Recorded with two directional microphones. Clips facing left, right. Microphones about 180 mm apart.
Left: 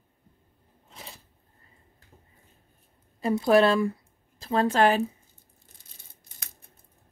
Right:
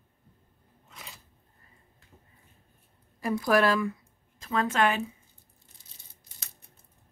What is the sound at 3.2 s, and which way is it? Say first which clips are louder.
A woman's voice: left 4 dB; 25° left (ahead or behind).